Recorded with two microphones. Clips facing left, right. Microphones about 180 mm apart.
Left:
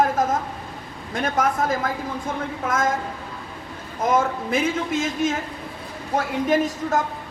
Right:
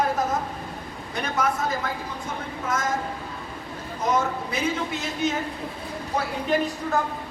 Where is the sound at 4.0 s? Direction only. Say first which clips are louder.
Left 3 dB; 50° left (ahead or behind).